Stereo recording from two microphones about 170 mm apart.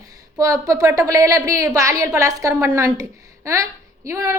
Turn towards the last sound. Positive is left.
turn(degrees=-20)  # may be behind; listen again after turning